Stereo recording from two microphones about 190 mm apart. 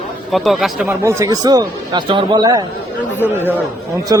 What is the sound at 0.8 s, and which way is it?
Speech, 15° right (ahead or behind).